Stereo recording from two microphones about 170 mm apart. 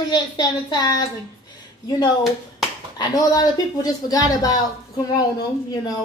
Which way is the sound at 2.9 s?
25° left (ahead or behind).